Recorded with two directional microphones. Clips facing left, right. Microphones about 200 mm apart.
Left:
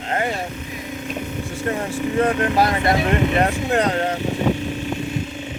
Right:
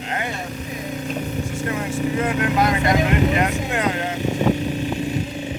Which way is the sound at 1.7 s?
35° left (ahead or behind).